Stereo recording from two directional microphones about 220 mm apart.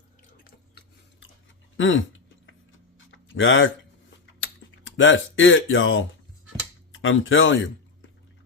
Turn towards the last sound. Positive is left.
turn(degrees=60)  # may be behind; listen again after turning